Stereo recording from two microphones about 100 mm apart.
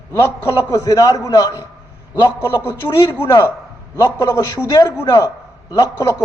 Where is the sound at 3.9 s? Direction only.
35° left (ahead or behind).